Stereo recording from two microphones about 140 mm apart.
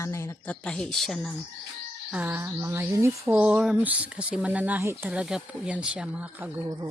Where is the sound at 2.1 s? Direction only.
15° right (ahead or behind).